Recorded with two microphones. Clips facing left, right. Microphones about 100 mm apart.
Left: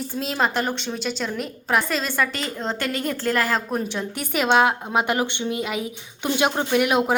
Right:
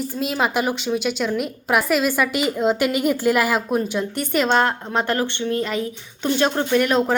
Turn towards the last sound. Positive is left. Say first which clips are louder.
# right 1 dB
turn(degrees=10)  # may be behind; listen again after turning